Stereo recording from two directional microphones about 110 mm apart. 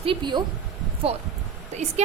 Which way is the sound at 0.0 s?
50° right (ahead or behind).